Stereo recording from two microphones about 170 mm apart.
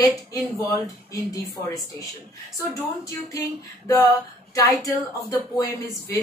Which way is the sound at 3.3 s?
20° left (ahead or behind).